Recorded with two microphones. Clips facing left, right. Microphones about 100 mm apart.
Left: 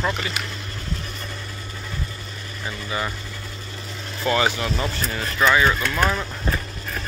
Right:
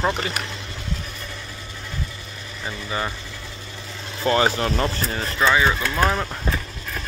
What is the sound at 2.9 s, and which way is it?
Speech, 25° right (ahead or behind).